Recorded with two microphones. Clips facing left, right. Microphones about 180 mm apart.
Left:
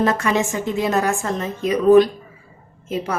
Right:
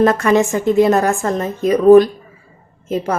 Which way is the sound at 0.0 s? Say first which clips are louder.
Right 6 dB; 50° right (ahead or behind).